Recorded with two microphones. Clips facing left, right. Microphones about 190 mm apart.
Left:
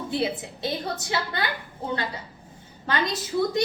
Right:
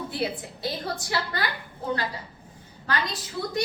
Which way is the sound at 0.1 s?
20° left (ahead or behind).